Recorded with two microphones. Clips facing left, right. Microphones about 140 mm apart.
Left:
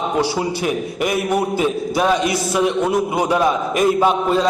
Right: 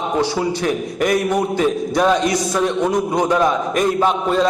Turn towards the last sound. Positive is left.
turn(degrees=5)  # may be behind; listen again after turning